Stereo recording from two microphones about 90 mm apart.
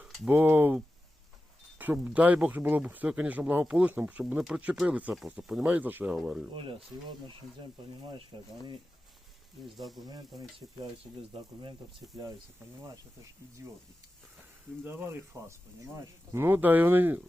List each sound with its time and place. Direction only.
0.3 s speech: 20° right (ahead or behind)
1.8 s speech: 20° right (ahead or behind)
6.1 s speech: 10° right (ahead or behind)
6.5 s speech: 80° right
7.3 s speech: 65° right (ahead or behind)
9.7 s speech: centre (ahead or behind)
10.0 s speech: 45° right (ahead or behind)
14.8 s speech: 25° right (ahead or behind)